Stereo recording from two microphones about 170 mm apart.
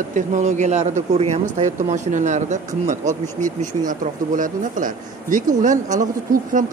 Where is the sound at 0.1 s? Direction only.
45° right (ahead or behind).